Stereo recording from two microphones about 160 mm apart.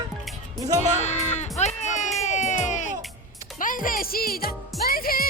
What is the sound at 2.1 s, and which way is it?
Music, 45° left (ahead or behind).